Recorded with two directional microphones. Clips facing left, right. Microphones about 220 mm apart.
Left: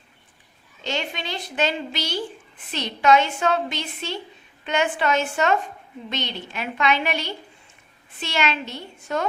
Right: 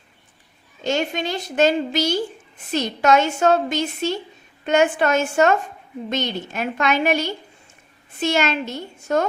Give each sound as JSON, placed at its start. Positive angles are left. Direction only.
{"t": 0.9, "sound": "a woman's voice", "side_deg": -45}